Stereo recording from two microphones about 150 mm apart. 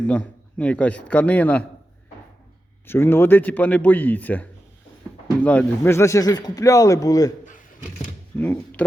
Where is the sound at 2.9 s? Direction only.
15° left (ahead or behind).